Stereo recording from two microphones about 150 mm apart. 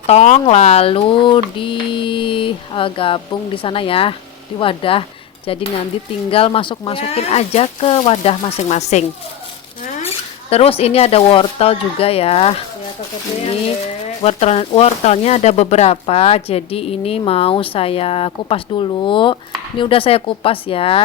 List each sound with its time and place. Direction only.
0.1 s speech: 50° left (ahead or behind)
10.5 s speech: 40° left (ahead or behind)